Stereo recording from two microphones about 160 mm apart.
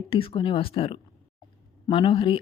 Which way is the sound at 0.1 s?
35° left (ahead or behind).